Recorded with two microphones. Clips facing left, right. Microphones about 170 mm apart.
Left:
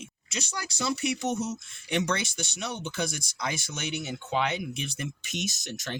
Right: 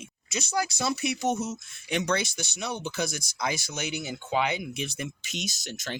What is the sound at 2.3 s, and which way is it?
Speech, 40° right (ahead or behind).